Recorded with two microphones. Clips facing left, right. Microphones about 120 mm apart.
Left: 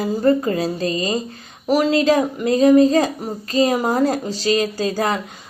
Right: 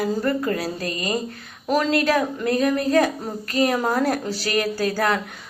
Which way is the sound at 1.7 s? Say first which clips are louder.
Left 4 dB; 15° left (ahead or behind).